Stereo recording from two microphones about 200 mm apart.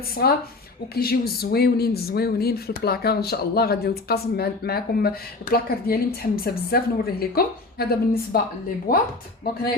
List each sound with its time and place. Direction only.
0.1 s speech: 50° left (ahead or behind)